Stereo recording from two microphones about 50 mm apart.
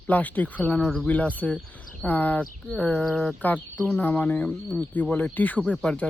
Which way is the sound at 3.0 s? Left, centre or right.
Centre.